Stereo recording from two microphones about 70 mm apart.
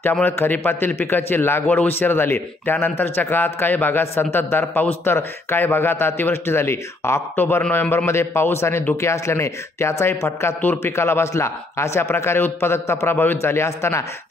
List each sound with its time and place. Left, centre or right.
0.2 s a man's voice: left